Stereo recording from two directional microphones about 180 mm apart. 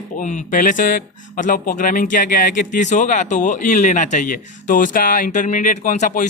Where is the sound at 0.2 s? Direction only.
45° left (ahead or behind).